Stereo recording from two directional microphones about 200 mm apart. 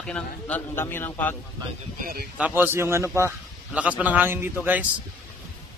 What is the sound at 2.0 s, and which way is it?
Speech, 45° right (ahead or behind).